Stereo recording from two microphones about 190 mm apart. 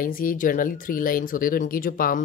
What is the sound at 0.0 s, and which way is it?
A woman's voice, 45° left (ahead or behind).